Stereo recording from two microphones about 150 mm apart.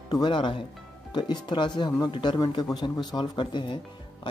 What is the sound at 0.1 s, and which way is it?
Speech, 30° left (ahead or behind).